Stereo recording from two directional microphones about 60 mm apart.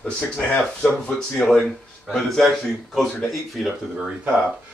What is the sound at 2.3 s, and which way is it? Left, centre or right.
Speech, centre.